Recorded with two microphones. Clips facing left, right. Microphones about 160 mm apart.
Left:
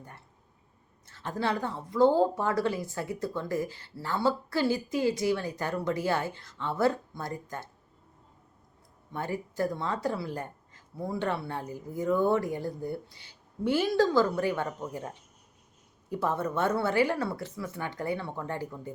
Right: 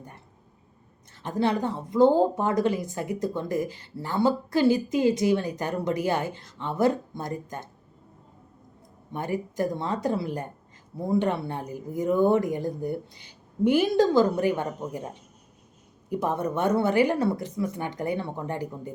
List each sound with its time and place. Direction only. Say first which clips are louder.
1.1 s speech: right 5 dB; 20° right (ahead or behind)
9.1 s speech: right 4 dB; 15° right (ahead or behind)